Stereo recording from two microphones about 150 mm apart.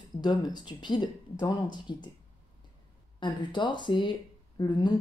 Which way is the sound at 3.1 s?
30° left (ahead or behind).